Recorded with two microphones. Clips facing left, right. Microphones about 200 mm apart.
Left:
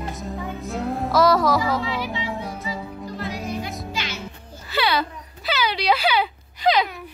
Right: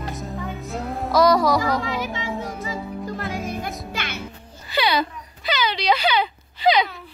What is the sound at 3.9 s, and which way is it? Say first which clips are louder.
Music: even; 60° right (ahead or behind).